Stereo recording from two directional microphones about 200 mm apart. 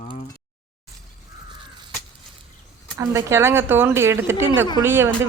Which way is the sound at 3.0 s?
15° right (ahead or behind).